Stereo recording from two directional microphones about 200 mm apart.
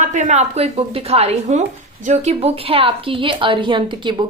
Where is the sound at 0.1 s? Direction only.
35° right (ahead or behind).